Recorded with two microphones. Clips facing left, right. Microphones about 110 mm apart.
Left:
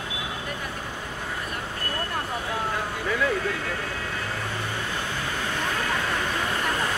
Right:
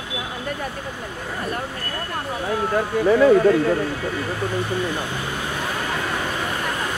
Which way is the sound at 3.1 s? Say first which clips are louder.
Right 12 dB; 35° right (ahead or behind).